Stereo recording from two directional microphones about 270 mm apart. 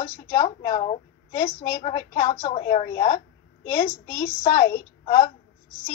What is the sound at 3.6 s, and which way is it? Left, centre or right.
Speech, centre.